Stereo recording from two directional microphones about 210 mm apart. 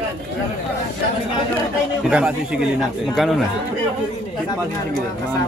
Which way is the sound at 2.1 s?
5° right (ahead or behind).